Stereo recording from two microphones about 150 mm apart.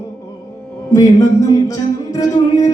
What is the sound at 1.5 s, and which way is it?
Music, 25° left (ahead or behind).